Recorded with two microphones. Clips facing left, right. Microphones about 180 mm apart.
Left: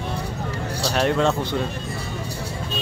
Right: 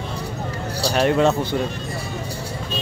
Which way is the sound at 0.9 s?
5° right (ahead or behind).